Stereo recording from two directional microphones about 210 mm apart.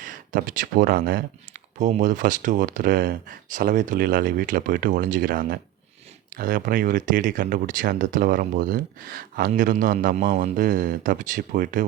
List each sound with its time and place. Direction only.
0.0 s speech: 40° right (ahead or behind)